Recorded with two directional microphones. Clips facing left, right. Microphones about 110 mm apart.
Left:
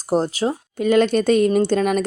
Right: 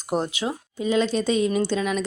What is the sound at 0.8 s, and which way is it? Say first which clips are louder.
Speech: left 6 dB; 60° left (ahead or behind).